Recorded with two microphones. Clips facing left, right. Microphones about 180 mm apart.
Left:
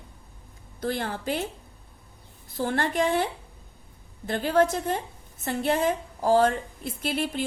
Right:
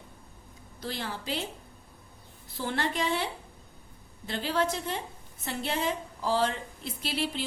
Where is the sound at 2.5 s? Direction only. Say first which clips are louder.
Left 5 dB; 50° left (ahead or behind).